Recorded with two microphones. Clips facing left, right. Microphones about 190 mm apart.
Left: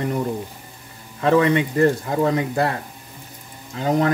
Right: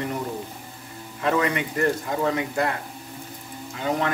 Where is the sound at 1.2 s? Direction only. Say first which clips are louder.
Left 7 dB; 30° left (ahead or behind).